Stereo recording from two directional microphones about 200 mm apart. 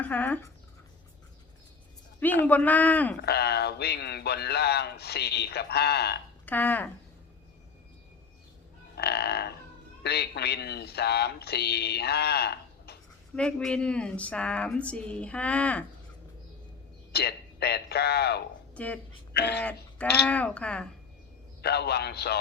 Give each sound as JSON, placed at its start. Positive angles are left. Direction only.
{"t": 0.0, "sound": "speech", "side_deg": 10}
{"t": 2.2, "sound": "speech", "side_deg": 10}
{"t": 3.2, "sound": "speech", "side_deg": 55}
{"t": 6.4, "sound": "frog", "side_deg": 10}
{"t": 9.0, "sound": "livestock", "side_deg": 55}
{"t": 10.0, "sound": "speech", "side_deg": 55}
{"t": 13.3, "sound": "a woman's voice", "side_deg": 5}
{"t": 17.1, "sound": "a man's voice", "side_deg": 55}
{"t": 18.7, "sound": "a woman's voice", "side_deg": 5}
{"t": 19.3, "sound": "speech", "side_deg": 55}
{"t": 19.6, "sound": "speech", "side_deg": 5}
{"t": 21.6, "sound": "speech", "side_deg": 55}